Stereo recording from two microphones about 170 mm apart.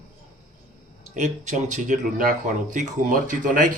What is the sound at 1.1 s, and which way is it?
Speech, 45° right (ahead or behind).